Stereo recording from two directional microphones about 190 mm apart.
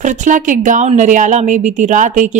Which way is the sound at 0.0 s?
40° right (ahead or behind).